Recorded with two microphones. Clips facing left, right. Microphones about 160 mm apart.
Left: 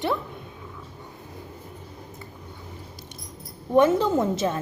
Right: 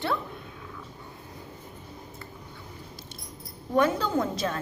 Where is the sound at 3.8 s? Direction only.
25° left (ahead or behind).